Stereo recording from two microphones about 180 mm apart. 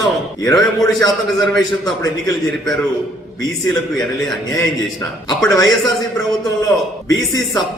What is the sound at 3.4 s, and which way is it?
Speech, 20° left (ahead or behind).